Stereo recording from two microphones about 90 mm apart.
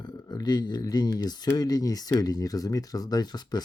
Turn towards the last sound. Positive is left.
turn(degrees=50)  # may be behind; listen again after turning